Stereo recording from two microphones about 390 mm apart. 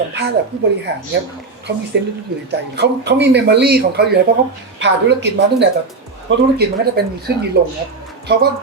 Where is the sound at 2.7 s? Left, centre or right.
Right.